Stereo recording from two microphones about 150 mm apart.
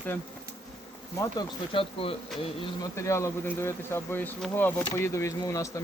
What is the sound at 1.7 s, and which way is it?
Speech, 35° left (ahead or behind).